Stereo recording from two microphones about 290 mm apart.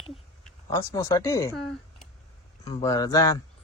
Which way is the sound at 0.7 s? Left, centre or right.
Centre.